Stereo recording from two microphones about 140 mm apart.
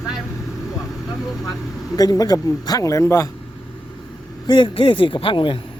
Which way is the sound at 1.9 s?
25° left (ahead or behind).